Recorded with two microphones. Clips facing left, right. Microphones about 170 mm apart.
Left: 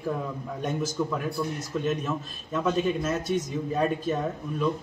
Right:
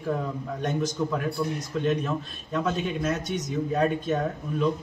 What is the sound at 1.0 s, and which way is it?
A man's voice, centre (ahead or behind).